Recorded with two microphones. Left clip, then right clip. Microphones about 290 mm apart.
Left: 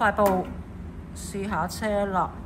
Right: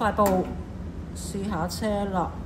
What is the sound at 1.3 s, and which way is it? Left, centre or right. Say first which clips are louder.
Speech: left 2 dB; centre.